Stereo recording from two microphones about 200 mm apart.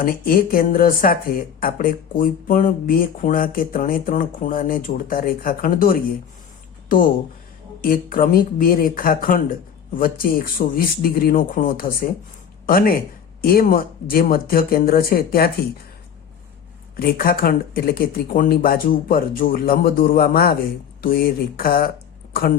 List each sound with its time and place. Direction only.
0.0 s speech: 45° left (ahead or behind)
17.0 s speech: 50° left (ahead or behind)